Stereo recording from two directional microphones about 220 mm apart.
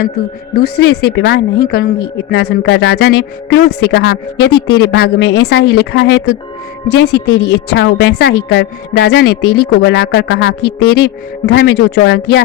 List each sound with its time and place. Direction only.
0.6 s speech: 50° left (ahead or behind)